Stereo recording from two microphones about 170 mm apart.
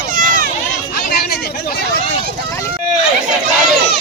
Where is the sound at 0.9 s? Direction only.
65° left (ahead or behind).